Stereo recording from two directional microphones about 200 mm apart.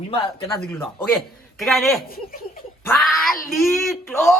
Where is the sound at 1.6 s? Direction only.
Centre (ahead or behind).